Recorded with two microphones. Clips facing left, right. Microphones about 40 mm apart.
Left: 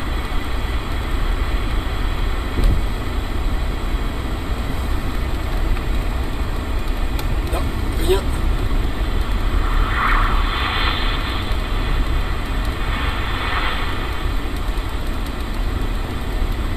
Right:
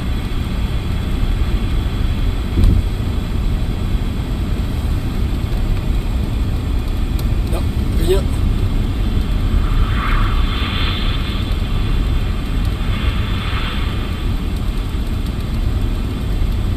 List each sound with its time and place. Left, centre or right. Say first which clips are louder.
8.1 s vehicle: right 1 dB; centre
9.9 s vehicle: left 5 dB; centre